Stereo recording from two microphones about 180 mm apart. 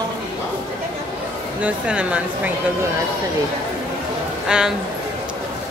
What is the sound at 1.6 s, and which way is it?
Speech, 5° right (ahead or behind).